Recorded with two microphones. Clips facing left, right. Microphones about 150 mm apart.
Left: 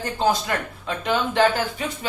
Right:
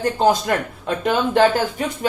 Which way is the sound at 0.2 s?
50° right (ahead or behind).